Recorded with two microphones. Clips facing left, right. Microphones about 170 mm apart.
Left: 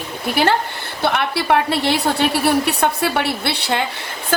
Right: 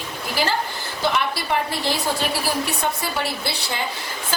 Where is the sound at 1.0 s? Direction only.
65° left (ahead or behind).